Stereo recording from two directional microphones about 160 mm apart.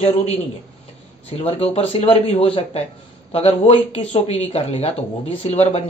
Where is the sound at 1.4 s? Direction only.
35° left (ahead or behind).